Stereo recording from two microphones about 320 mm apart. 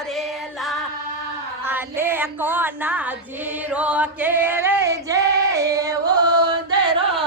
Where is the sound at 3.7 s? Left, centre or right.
Centre.